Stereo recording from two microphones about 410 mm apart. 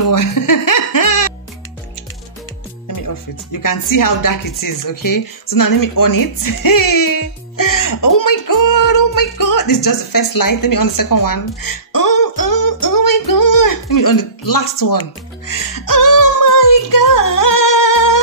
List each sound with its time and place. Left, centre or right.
0.0 s music: left
3.6 s speech: left
15.4 s music: left